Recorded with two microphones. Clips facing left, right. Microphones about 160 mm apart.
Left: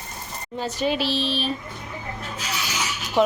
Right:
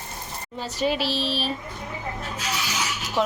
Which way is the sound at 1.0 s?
40° right (ahead or behind).